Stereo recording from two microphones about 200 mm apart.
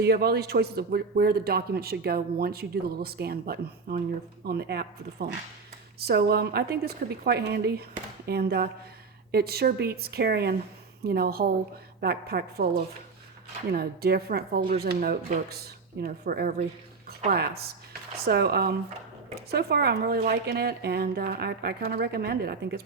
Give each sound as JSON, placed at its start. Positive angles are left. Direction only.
{"t": 0.0, "sound": "a man's voice", "side_deg": -50}